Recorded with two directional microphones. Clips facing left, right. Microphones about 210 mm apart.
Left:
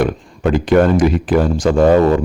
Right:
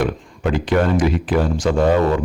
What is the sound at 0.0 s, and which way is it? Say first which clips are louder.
Speech: left 4 dB; 45° left (ahead or behind).